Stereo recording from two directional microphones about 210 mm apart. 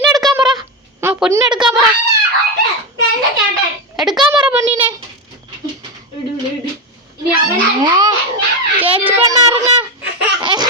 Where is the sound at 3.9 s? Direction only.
Centre (ahead or behind).